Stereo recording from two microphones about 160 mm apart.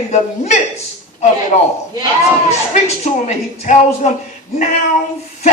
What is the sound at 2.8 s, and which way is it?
A woman's voice, 45° left (ahead or behind).